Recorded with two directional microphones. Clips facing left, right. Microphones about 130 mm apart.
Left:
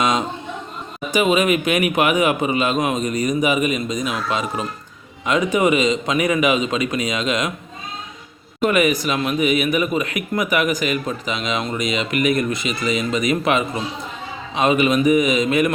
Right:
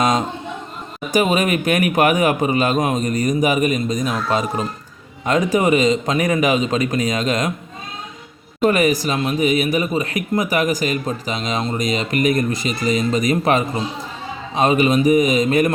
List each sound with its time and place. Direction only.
1.1 s speech: 40° right (ahead or behind)
8.6 s speech: 35° right (ahead or behind)